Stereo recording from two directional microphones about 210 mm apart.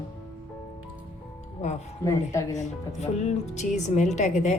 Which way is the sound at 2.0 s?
15° left (ahead or behind).